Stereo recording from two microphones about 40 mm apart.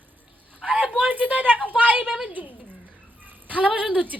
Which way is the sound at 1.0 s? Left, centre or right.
Right.